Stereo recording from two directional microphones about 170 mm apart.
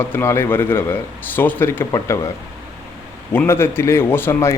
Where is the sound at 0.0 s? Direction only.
10° left (ahead or behind).